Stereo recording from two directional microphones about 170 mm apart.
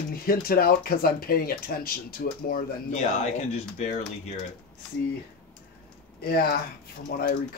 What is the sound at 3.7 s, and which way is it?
Speech, 45° left (ahead or behind).